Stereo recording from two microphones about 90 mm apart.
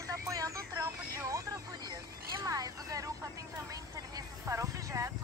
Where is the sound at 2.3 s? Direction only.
40° right (ahead or behind).